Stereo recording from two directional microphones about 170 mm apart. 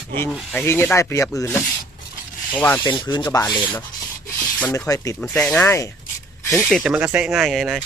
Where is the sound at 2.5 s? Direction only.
10° left (ahead or behind).